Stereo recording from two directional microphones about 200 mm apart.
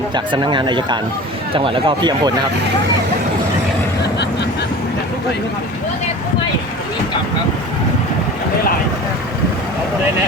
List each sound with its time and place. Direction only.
0.1 s speech: 20° right (ahead or behind)